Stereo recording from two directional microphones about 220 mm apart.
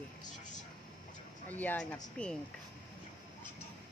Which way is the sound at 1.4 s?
5° left (ahead or behind).